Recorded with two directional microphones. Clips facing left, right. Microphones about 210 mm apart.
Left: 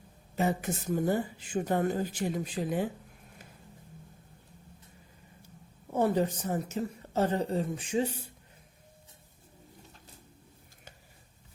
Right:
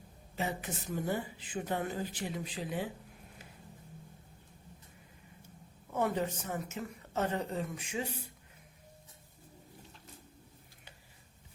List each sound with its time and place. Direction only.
0.3 s speech: 45° left (ahead or behind)
5.9 s a woman's voice: 35° left (ahead or behind)